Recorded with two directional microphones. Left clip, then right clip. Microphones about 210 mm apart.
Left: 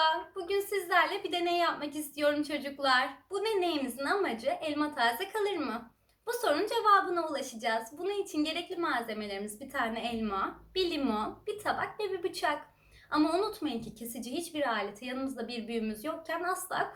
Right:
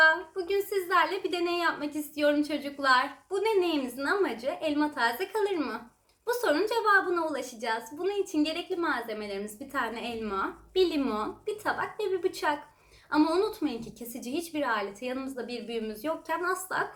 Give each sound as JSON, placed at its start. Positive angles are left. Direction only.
{"t": 0.0, "sound": "a woman's voice", "side_deg": -5}